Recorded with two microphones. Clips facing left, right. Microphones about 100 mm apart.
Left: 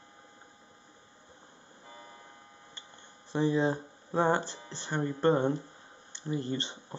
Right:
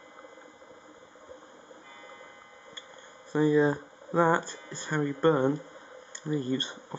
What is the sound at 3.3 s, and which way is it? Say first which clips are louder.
Speech: right 4 dB; 45° right (ahead or behind).